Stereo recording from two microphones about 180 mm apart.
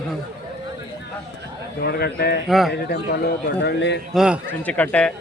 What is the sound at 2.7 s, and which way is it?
A man's voice, 65° left (ahead or behind).